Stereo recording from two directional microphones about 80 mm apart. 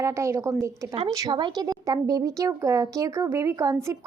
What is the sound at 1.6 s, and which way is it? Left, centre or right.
Speech, right.